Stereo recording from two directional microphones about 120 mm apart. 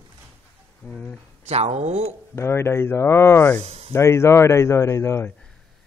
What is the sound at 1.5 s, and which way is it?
Speech, 60° right (ahead or behind).